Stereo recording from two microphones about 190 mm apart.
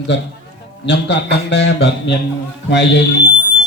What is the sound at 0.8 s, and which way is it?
Speech, 65° left (ahead or behind).